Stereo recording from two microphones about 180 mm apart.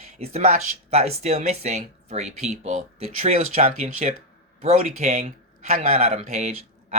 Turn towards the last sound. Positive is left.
turn(degrees=-40)  # may be behind; listen again after turning